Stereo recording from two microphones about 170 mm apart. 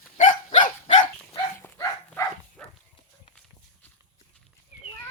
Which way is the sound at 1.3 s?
15° left (ahead or behind).